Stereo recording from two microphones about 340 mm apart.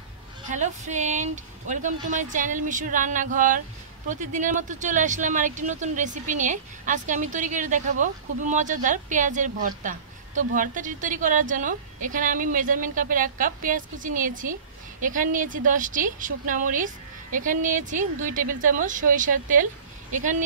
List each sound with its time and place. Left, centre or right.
0.5 s speech: right